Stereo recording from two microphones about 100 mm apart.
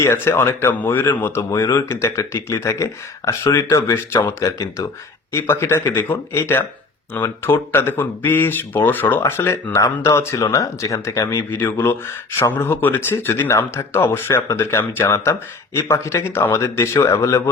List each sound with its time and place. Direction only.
0.0 s speech: 25° left (ahead or behind)
1.5 s speech: 35° left (ahead or behind)